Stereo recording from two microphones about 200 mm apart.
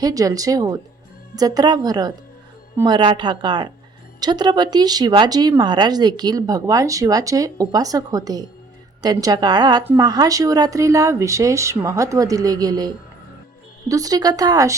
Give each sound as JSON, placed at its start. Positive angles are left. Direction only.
{"t": 0.0, "sound": "speech", "side_deg": -15}